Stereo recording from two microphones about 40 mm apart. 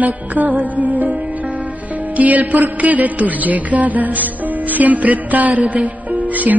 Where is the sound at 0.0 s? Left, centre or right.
Right.